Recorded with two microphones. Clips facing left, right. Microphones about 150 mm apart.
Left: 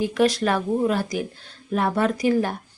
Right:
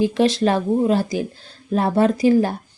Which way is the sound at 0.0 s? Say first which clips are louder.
Right 3 dB; 30° right (ahead or behind).